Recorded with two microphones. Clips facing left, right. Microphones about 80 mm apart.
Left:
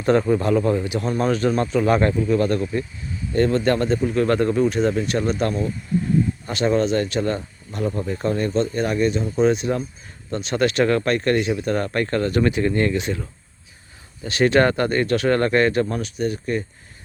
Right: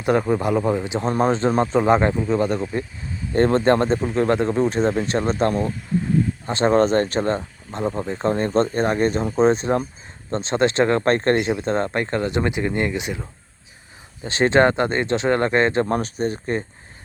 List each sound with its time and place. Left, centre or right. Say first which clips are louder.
0.0 s speech: left 1 dB; centre
3.3 s speech: right 2 dB; right; by 13.2 s centre
14.3 s speech: right 1 dB; right
15.9 s speech: right 2 dB; right